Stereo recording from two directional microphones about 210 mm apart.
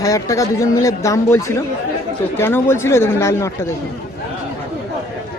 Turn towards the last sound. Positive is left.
turn(degrees=15)  # may be behind; listen again after turning